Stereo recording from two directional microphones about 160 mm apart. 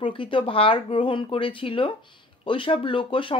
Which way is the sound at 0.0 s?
30° left (ahead or behind).